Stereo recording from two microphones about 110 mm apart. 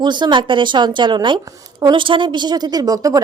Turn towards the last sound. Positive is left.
turn(degrees=-35)  # may be behind; listen again after turning